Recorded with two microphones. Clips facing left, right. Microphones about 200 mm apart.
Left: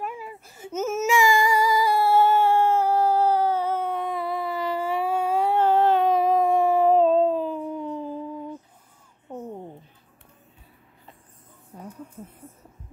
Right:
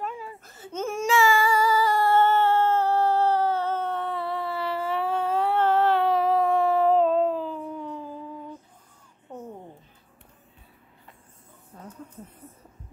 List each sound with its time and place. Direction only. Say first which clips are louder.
0.0 s baby cry: left 1 dB; 10° left (ahead or behind)
1.1 s child singing: even; 15° left (ahead or behind)
11.7 s a sound: left 4 dB; 15° left (ahead or behind)